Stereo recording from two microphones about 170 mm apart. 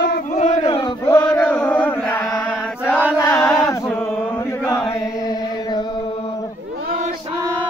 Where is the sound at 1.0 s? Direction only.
15° left (ahead or behind).